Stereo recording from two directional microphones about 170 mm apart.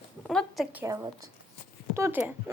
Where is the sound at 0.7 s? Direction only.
15° right (ahead or behind).